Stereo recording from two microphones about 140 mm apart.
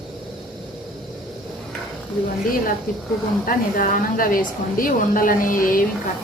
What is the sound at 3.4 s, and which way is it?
A woman's voice, 85° left.